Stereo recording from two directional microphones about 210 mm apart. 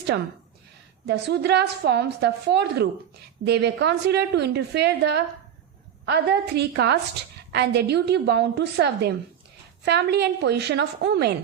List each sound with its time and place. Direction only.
1.0 s a woman's voice: 55° right (ahead or behind)